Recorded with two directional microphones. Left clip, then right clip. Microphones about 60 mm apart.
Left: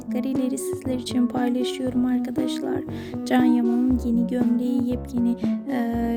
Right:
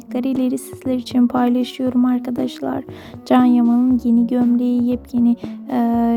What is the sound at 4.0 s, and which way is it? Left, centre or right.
Speech, right.